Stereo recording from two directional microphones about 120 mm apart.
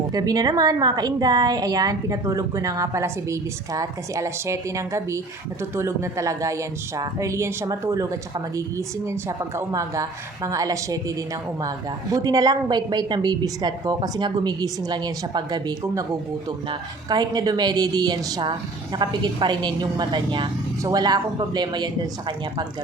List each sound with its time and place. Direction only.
0.1 s a woman's voice: 35° right (ahead or behind)
12.1 s a woman's voice: 30° right (ahead or behind)